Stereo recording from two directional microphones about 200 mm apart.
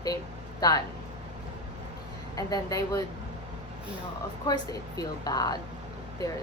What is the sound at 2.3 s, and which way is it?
Speech, 15° left (ahead or behind).